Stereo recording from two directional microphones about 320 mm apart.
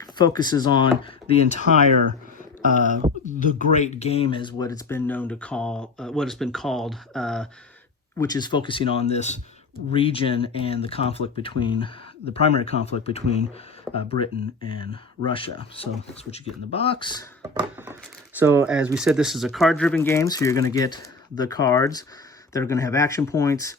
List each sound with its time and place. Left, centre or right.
0.2 s speech: centre
1.9 s a sound: right
3.2 s speech: left; by 7.4 s centre
8.2 s speech: centre
13.9 s speech: centre
14.8 s speech: centre
17.4 s a sound: centre
18.3 s speech: centre